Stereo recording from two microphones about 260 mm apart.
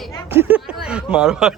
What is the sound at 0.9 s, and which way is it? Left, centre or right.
Speech, centre.